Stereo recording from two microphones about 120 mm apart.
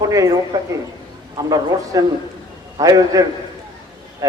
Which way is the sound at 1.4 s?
30° right (ahead or behind).